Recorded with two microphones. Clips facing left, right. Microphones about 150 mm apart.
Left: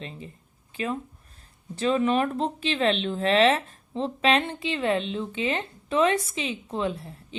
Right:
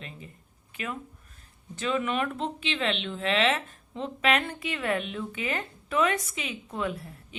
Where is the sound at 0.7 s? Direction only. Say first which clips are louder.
Left 6 dB; 30° left (ahead or behind).